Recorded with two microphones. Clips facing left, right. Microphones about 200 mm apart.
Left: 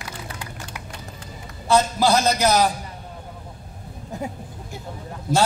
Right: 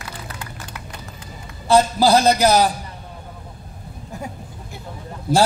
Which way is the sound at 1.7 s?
30° right (ahead or behind).